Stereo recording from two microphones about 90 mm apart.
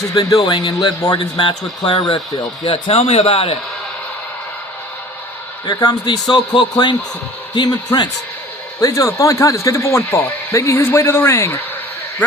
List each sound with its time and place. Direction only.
0.1 s speech: 40° left (ahead or behind); by 2.1 s 65° left (ahead or behind)
2.6 s a man's voice: 85° left
5.6 s speech: 50° left (ahead or behind)
8.8 s speech: 40° left (ahead or behind)